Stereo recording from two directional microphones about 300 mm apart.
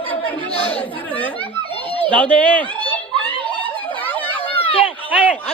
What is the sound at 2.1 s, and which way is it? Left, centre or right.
Speech, centre.